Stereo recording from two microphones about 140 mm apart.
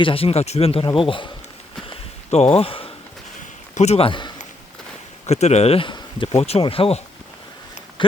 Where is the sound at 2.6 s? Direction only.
40° left (ahead or behind).